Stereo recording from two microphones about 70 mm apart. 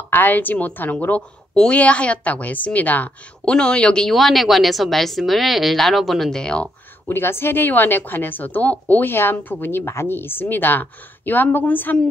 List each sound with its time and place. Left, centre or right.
0.1 s speech: left
3.5 s a woman's voice: centre
6.4 s speech: centre
7.1 s speech: left